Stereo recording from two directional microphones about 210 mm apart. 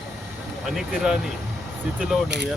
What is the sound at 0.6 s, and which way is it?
Speech, centre (ahead or behind).